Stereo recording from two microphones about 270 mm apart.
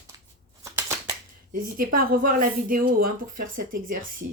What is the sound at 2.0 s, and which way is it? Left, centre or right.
Speech, right.